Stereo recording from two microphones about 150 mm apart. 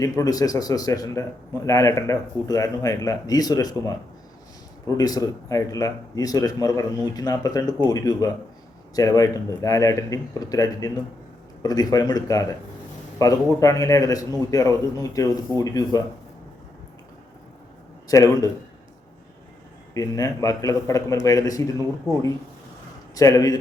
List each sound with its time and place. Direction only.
0.0 s a man's voice: 25° left (ahead or behind)
19.9 s a man's voice: 25° left (ahead or behind)
23.1 s a man's voice: 25° left (ahead or behind)